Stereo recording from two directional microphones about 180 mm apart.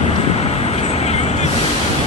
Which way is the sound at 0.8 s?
35° left (ahead or behind).